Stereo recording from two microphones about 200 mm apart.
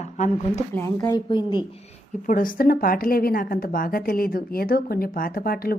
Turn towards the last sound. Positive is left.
turn(degrees=50)  # may be behind; listen again after turning